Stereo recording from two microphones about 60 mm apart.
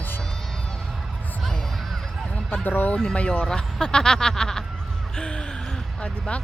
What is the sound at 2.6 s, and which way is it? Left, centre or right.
Speech, left.